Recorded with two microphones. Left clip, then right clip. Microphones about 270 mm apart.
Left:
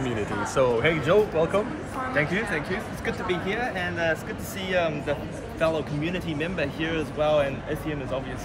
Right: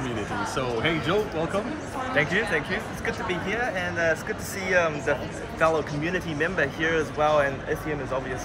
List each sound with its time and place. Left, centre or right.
0.6 s speech: left
2.1 s speech: centre